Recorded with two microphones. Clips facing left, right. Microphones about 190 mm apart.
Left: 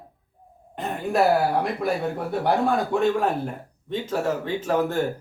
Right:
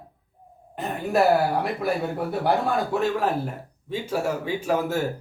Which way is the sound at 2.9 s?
Centre (ahead or behind).